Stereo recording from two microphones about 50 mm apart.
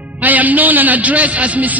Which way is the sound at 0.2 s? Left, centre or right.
Right.